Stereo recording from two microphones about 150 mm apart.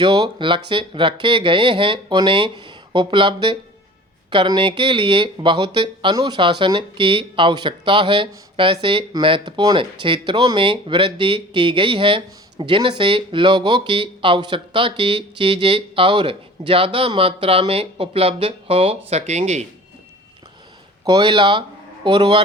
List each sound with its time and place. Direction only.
0.0 s speech: 30° right (ahead or behind); by 19.6 s 50° right (ahead or behind)
21.0 s speech: 30° right (ahead or behind)